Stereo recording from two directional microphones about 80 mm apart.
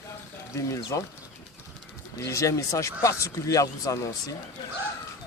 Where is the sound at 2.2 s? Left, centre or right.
Left.